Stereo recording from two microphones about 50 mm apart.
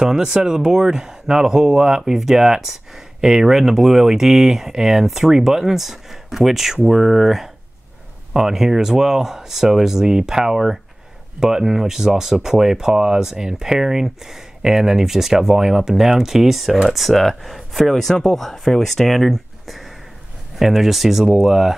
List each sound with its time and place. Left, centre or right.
0.0 s speech: centre